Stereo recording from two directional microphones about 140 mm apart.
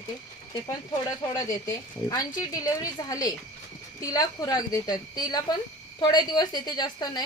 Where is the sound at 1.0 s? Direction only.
25° left (ahead or behind).